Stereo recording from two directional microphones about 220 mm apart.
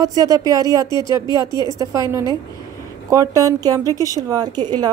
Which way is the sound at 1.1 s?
15° right (ahead or behind).